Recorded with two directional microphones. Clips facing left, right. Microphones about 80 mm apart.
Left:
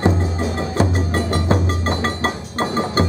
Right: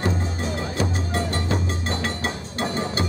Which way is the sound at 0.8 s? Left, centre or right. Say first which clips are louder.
Left 7 dB; left.